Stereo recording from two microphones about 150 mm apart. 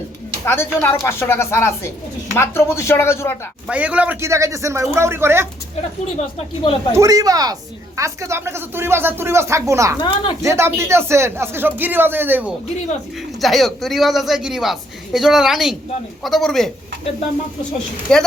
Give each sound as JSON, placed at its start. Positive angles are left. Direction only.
{"t": 0.4, "sound": "speech", "side_deg": 15}
{"t": 3.7, "sound": "speech", "side_deg": -10}
{"t": 6.6, "sound": "speech", "side_deg": 30}
{"t": 6.9, "sound": "speech", "side_deg": -20}
{"t": 13.4, "sound": "a man's voice", "side_deg": 0}
{"t": 18.1, "sound": "a man's voice", "side_deg": 5}